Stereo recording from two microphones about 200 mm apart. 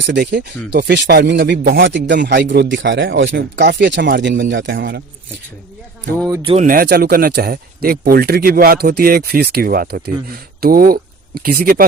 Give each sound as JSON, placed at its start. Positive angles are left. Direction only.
{"t": 0.0, "sound": "speech", "side_deg": -60}
{"t": 6.4, "sound": "speech", "side_deg": -30}
{"t": 6.7, "sound": "speech", "side_deg": -50}